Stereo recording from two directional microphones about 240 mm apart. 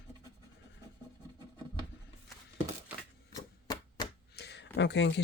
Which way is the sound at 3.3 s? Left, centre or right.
Centre.